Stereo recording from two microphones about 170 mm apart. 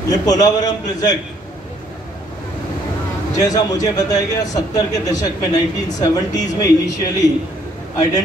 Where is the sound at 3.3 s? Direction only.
20° left (ahead or behind).